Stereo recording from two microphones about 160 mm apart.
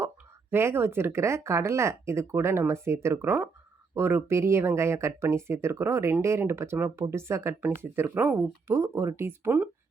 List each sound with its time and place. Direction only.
0.5 s speech: 15° right (ahead or behind)